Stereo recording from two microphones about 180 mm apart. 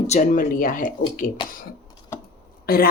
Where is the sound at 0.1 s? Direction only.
45° left (ahead or behind).